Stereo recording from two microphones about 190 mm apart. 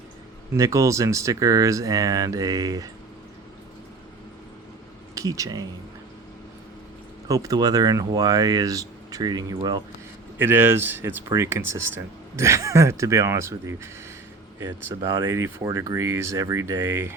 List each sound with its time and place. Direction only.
0.5 s speech: 15° right (ahead or behind)
5.1 s speech: 15° right (ahead or behind)
7.3 s speech: 20° right (ahead or behind)
10.3 s speech: 10° right (ahead or behind)